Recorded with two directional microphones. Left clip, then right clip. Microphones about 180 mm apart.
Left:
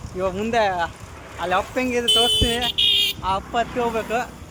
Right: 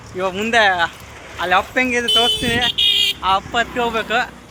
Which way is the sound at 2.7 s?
40° right (ahead or behind).